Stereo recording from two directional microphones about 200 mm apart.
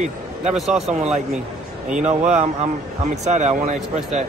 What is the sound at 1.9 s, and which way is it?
Speech, 35° right (ahead or behind).